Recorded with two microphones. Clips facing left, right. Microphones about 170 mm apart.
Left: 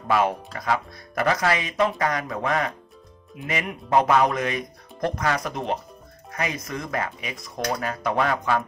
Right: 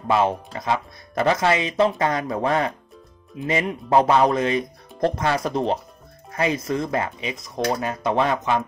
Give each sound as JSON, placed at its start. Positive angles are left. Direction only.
{"t": 0.1, "sound": "speech", "side_deg": -25}